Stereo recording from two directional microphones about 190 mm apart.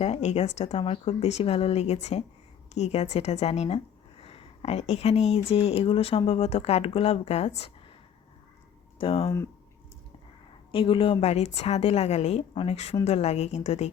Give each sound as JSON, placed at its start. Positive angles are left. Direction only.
{"t": 0.0, "sound": "speech", "side_deg": 35}
{"t": 9.0, "sound": "speech", "side_deg": 30}
{"t": 10.7, "sound": "speech", "side_deg": 30}